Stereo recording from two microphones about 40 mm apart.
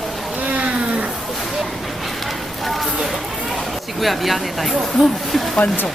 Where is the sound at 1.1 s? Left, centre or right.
Centre.